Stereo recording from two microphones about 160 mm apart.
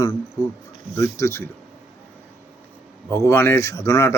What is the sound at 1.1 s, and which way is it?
Speech, 15° left (ahead or behind).